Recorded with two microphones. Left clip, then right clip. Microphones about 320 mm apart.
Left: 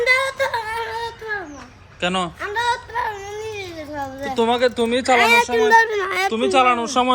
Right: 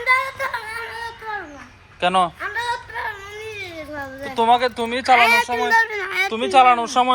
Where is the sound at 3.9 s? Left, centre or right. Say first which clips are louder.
Left 1 dB; centre.